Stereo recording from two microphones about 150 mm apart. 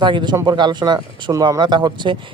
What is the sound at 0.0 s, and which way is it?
Speech, 30° right (ahead or behind).